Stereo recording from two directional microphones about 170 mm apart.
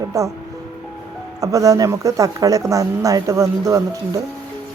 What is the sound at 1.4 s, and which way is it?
Speech, 20° right (ahead or behind).